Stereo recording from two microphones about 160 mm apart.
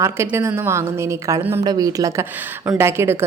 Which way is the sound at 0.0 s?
15° right (ahead or behind).